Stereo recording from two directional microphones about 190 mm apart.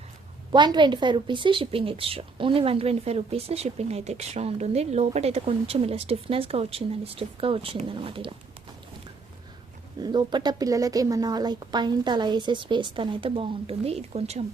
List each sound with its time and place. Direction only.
0.5 s a woman's voice: 25° right (ahead or behind)
10.0 s a woman's voice: 20° right (ahead or behind)